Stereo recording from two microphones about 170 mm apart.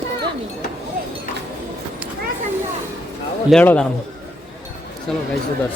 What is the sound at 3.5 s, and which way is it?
Speech, 10° left (ahead or behind).